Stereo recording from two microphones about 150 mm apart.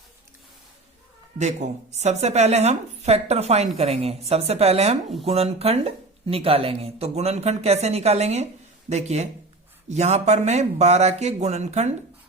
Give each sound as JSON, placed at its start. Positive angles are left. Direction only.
{"t": 1.4, "sound": "speech", "side_deg": -50}